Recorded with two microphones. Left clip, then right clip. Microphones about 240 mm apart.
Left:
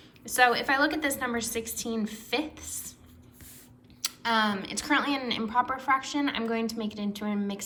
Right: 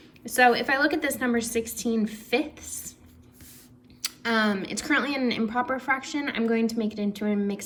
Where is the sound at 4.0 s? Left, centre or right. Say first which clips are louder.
Right 1 dB; centre.